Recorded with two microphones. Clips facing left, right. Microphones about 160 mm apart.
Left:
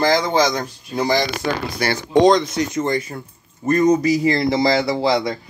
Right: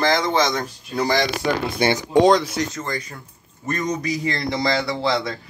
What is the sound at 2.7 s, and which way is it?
Speech, 25° left (ahead or behind).